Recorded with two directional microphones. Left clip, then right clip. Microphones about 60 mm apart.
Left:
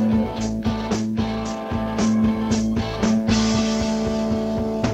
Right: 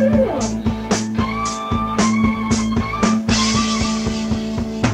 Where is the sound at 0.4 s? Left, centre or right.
Left.